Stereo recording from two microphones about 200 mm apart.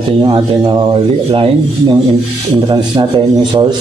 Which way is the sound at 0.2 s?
20° right (ahead or behind).